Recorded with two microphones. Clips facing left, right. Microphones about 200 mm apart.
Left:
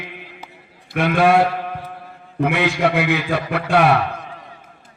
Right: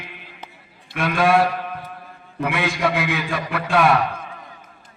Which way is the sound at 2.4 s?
65° left (ahead or behind).